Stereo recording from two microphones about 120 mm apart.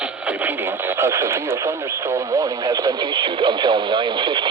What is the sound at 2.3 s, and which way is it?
Speech, 30° right (ahead or behind).